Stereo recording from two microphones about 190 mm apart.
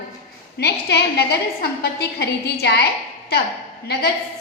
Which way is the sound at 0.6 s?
60° left (ahead or behind).